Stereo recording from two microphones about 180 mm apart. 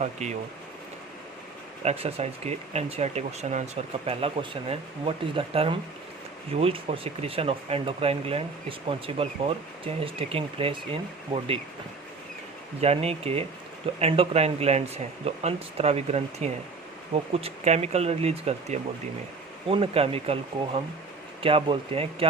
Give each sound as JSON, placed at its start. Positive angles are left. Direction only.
{"t": 0.0, "sound": "speech", "side_deg": -40}
{"t": 1.8, "sound": "speech", "side_deg": -35}
{"t": 12.8, "sound": "speech", "side_deg": -35}